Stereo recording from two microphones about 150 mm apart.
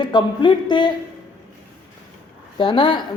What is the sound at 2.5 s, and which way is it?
Speech, 35° left (ahead or behind).